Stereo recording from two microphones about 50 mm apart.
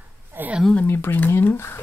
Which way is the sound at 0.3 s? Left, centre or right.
Right.